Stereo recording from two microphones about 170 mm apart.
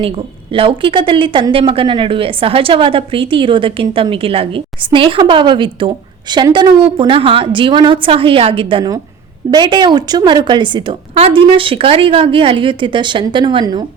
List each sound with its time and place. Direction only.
0.5 s a woman's voice: 30° right (ahead or behind)